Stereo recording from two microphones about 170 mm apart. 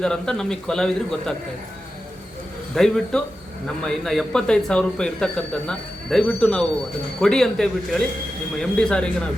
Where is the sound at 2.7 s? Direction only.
Centre (ahead or behind).